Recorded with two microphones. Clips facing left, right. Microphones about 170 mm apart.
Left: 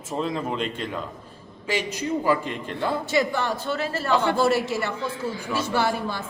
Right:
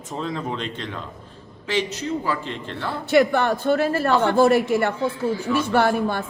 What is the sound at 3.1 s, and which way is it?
A woman's voice, 60° right (ahead or behind).